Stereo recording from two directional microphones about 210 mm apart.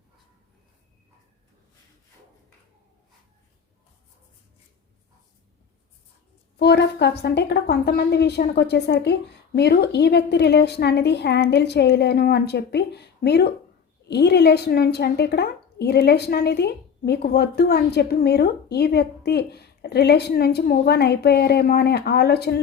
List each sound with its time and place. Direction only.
6.6 s a woman's voice: 50° left (ahead or behind)